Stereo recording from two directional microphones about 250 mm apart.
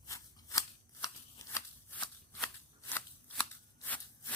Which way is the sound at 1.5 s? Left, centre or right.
Centre.